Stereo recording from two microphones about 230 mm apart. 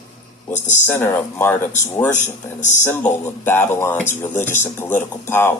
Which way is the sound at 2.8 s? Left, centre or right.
Centre.